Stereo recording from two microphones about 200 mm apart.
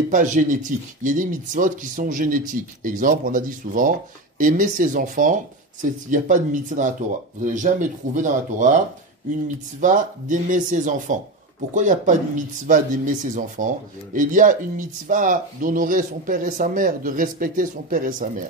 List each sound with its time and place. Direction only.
0.1 s speech: 40° right (ahead or behind)
9.8 s speech: 40° right (ahead or behind)